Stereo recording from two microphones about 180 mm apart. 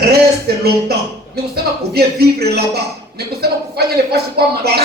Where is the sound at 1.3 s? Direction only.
60° right (ahead or behind).